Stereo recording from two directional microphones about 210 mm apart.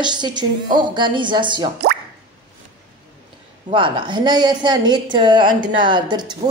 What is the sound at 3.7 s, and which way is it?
A woman's voice, 25° right (ahead or behind).